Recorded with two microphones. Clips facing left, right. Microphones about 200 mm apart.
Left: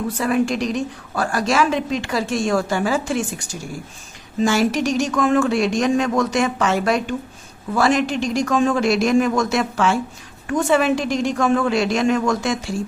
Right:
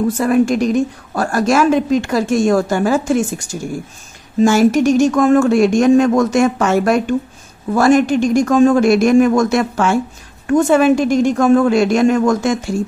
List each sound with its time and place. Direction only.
0.2 s a woman's voice: 50° right (ahead or behind)
4.4 s a woman's voice: 50° right (ahead or behind)